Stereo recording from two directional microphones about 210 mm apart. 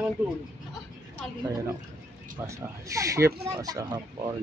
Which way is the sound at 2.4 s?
15° right (ahead or behind).